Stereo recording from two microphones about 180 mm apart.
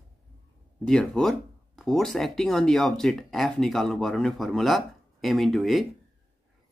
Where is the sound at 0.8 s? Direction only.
5° left (ahead or behind).